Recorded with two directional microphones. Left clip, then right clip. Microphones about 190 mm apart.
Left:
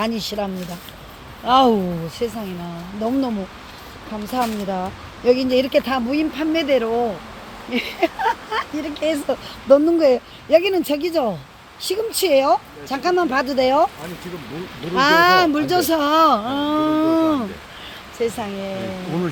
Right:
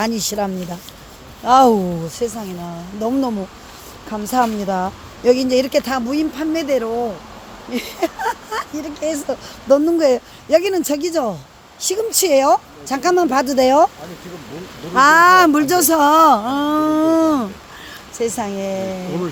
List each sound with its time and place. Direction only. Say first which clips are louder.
0.0 s speech: right 3 dB; 30° right (ahead or behind)
2.2 s speech: right 2 dB; 15° right (ahead or behind); by 13.9 s 40° right (ahead or behind)
14.9 s speech: right 4 dB; 30° right (ahead or behind)